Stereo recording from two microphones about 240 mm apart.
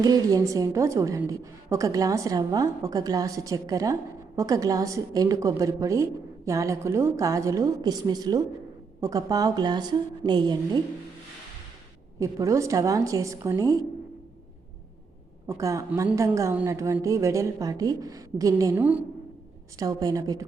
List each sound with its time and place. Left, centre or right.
0.0 s a woman's voice: centre
12.2 s a woman's voice: centre
15.4 s a woman's voice: centre